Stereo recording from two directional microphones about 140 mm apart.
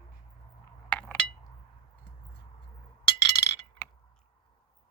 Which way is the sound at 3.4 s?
30° left (ahead or behind).